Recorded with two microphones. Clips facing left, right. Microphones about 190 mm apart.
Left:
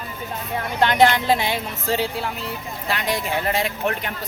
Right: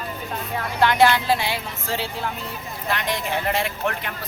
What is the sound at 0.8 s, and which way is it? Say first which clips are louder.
Speech: left 1 dB; 20° left (ahead or behind).